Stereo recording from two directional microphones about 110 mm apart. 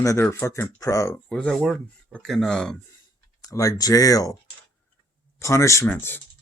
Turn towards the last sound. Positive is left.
turn(degrees=20)  # may be behind; listen again after turning